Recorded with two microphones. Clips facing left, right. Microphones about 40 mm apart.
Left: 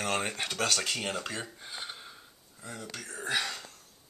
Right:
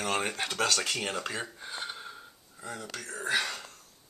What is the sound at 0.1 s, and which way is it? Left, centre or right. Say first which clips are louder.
Speech: right 3 dB; right.